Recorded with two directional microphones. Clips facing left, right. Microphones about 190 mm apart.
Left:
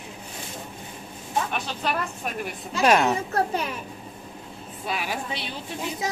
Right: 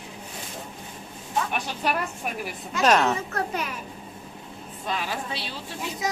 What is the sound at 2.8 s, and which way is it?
Speech, 10° left (ahead or behind).